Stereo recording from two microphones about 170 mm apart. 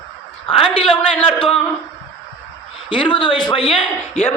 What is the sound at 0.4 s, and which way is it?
Speech, 35° left (ahead or behind).